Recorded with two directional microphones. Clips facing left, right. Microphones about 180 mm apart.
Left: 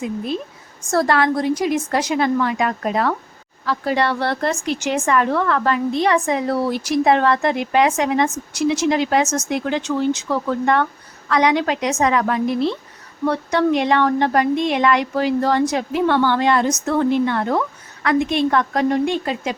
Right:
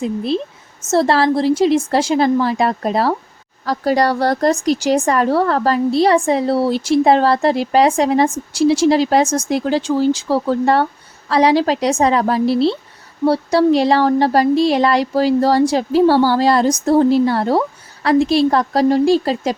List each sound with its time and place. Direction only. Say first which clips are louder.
0.0 s a woman's voice: right 5 dB; 30° right (ahead or behind)